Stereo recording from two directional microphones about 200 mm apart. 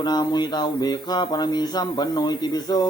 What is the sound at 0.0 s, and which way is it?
Speech, 20° left (ahead or behind).